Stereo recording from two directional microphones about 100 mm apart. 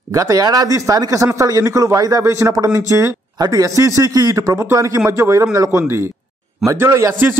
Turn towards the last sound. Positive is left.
turn(degrees=-25)  # may be behind; listen again after turning